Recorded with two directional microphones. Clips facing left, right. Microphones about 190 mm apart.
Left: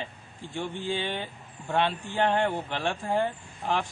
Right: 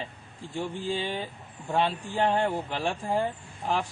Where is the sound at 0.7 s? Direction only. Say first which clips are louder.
Left 1 dB; 35° right (ahead or behind).